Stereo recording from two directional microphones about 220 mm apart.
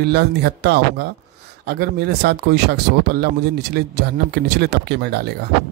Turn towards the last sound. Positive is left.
turn(degrees=-50)  # may be behind; listen again after turning